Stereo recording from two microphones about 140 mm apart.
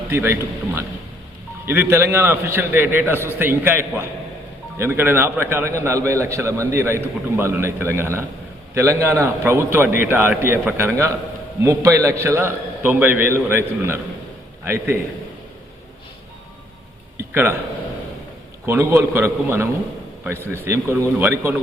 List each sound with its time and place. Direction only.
0.1 s a man's voice: 15° right (ahead or behind)
1.6 s a man's voice: 15° right (ahead or behind)
17.2 s a sound: 15° right (ahead or behind)
18.6 s a man's voice: 15° right (ahead or behind)